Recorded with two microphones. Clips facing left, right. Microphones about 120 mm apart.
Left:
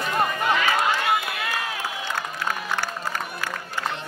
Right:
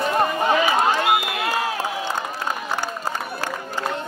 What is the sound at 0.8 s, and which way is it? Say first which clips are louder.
Run: right 4 dB; 40° right (ahead or behind).